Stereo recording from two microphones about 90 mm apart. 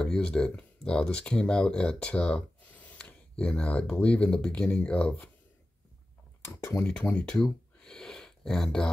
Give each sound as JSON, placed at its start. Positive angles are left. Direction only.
{"t": 0.0, "sound": "speech", "side_deg": 10}
{"t": 6.4, "sound": "speech", "side_deg": 30}
{"t": 6.8, "sound": "speech", "side_deg": 10}
{"t": 7.4, "sound": "a sound", "side_deg": 10}